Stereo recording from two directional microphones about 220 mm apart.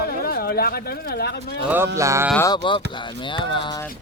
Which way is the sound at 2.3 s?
15° left (ahead or behind).